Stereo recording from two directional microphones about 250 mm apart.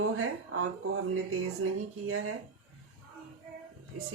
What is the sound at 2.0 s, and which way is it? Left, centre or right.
Speech, right.